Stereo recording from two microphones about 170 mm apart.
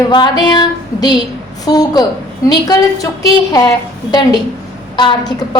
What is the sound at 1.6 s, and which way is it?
A woman's voice, 20° left (ahead or behind).